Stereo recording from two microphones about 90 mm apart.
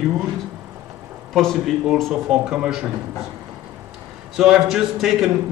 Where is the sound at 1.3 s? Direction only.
5° left (ahead or behind).